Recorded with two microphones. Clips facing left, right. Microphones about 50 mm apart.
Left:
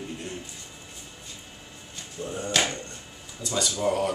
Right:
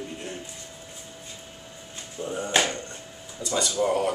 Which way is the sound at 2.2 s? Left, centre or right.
Centre.